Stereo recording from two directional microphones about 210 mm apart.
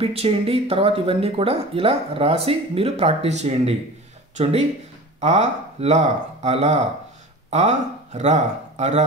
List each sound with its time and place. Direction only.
0.0 s speech: 30° right (ahead or behind)